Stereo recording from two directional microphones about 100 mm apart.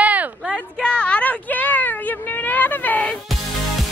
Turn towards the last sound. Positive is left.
turn(degrees=15)  # may be behind; listen again after turning